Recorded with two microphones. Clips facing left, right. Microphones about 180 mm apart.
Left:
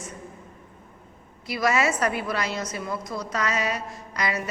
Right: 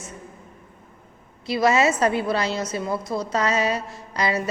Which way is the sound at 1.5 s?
25° right (ahead or behind).